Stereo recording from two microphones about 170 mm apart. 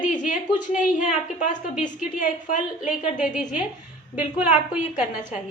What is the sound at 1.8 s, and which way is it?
Speech, 45° left (ahead or behind).